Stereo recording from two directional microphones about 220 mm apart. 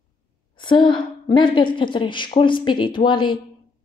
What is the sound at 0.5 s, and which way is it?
Speech, 20° left (ahead or behind).